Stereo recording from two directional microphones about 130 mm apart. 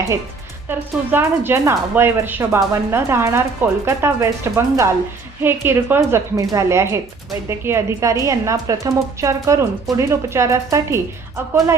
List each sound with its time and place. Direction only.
0.7 s speech: 15° right (ahead or behind)